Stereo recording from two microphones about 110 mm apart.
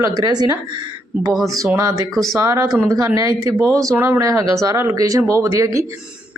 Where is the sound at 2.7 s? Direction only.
5° left (ahead or behind).